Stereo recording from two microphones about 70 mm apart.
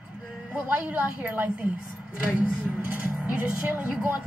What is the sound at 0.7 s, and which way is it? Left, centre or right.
Speech, right.